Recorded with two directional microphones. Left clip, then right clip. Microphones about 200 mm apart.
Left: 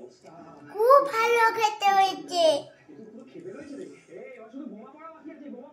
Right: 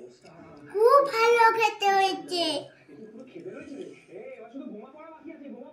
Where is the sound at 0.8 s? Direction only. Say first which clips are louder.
Even; 20° left (ahead or behind).